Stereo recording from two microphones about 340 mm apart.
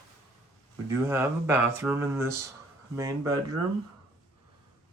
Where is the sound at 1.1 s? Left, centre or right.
Centre.